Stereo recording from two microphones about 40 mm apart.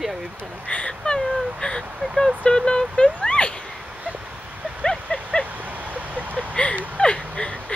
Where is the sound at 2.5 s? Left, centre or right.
Centre.